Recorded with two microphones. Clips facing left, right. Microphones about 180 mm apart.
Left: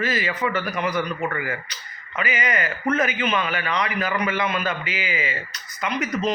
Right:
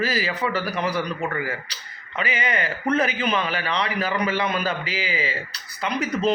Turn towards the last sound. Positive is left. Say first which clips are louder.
# even
turn(degrees=-30)  # may be behind; listen again after turning